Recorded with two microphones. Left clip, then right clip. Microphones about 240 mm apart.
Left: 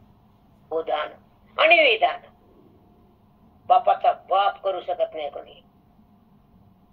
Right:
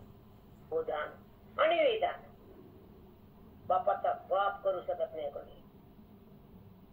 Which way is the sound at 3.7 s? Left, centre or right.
Left.